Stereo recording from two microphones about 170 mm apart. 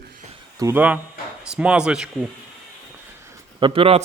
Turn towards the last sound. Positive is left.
turn(degrees=-35)  # may be behind; listen again after turning